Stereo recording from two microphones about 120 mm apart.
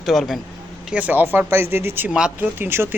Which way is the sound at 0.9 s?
15° right (ahead or behind).